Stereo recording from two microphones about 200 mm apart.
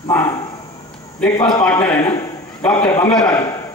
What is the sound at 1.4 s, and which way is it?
A man's voice, 20° left (ahead or behind).